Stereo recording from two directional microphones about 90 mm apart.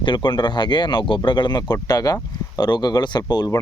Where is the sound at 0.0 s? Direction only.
60° left (ahead or behind).